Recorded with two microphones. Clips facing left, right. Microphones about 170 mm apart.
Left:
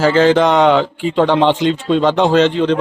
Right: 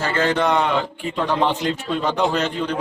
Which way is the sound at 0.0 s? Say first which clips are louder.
Left 9 dB; 90° left.